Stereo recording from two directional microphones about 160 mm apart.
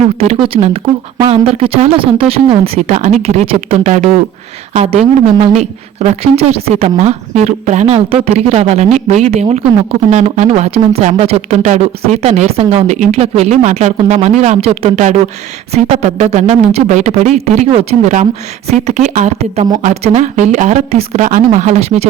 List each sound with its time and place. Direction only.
0.2 s a woman's voice: 35° right (ahead or behind)
3.9 s a woman's voice: 50° right (ahead or behind)